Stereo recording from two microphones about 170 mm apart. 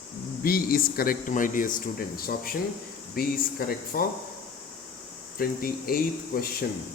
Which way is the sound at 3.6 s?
60° left (ahead or behind).